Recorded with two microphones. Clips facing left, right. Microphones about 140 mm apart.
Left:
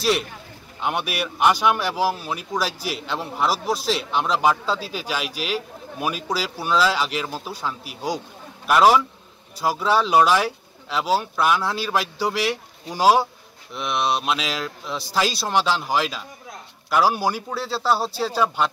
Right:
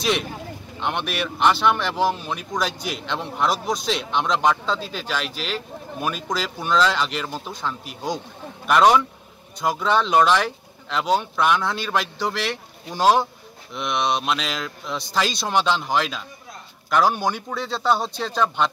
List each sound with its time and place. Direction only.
0.7 s speech: 5° left (ahead or behind)
8.6 s mantra: 5° left (ahead or behind)
9.6 s speech: 5° left (ahead or behind)
13.7 s mantra: 5° left (ahead or behind)
16.9 s speech: 5° left (ahead or behind)